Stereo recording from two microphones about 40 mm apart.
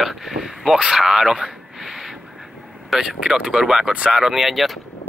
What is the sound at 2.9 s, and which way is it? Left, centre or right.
Speech, centre.